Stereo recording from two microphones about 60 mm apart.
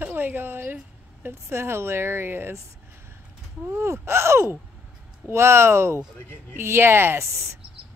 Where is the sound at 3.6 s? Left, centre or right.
Right.